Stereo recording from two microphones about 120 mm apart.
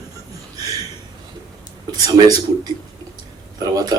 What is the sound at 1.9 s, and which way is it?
A man's voice, 30° right (ahead or behind).